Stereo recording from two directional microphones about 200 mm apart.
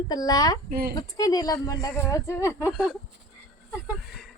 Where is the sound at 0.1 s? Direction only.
20° left (ahead or behind).